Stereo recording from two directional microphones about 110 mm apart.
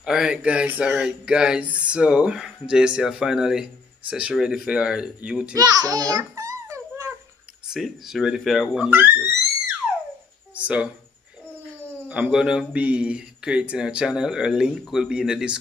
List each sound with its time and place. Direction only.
0.0 s speech: 5° right (ahead or behind)
5.6 s a sound: 35° right (ahead or behind)
7.6 s speech: 5° right (ahead or behind)
8.9 s music: 20° right (ahead or behind)
10.5 s speech: 10° right (ahead or behind)
12.1 s speech: 10° right (ahead or behind)